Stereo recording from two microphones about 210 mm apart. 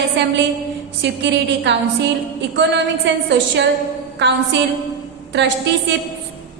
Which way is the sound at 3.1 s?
55° right (ahead or behind).